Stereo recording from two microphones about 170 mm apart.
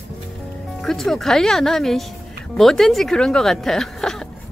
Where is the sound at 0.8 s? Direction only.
Centre (ahead or behind).